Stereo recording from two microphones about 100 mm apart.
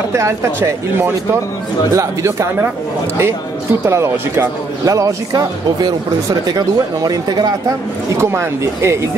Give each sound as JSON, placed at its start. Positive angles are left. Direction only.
{"t": 0.1, "sound": "speech", "side_deg": -30}
{"t": 3.8, "sound": "speech", "side_deg": -25}
{"t": 8.2, "sound": "speech", "side_deg": -25}